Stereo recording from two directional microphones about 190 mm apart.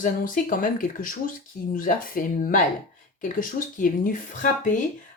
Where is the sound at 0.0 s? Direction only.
45° left (ahead or behind).